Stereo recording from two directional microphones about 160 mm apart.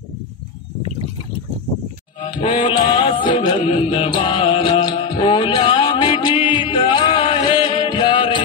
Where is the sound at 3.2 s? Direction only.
30° left (ahead or behind).